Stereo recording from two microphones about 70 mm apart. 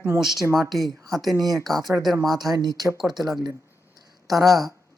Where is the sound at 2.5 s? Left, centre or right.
Right.